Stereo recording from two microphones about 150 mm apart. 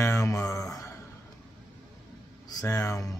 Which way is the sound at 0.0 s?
20° left (ahead or behind).